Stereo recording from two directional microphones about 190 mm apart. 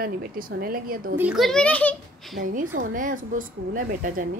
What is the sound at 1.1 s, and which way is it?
A child's voice, 5° right (ahead or behind).